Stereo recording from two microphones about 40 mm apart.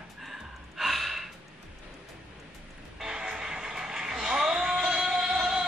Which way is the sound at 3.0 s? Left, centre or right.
Centre.